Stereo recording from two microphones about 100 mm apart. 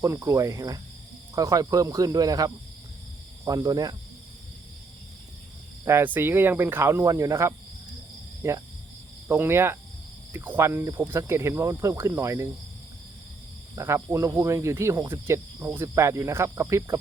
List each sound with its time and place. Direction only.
0.0 s speech: 35° right (ahead or behind)
5.8 s speech: 25° right (ahead or behind)
13.7 s speech: 30° right (ahead or behind)